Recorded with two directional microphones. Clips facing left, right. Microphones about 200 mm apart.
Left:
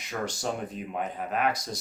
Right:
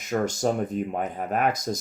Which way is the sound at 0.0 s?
45° right (ahead or behind).